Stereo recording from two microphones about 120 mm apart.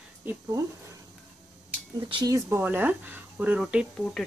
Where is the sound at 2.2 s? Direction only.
25° right (ahead or behind).